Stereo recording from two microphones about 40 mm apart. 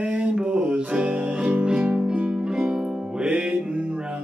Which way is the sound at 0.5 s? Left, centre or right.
Right.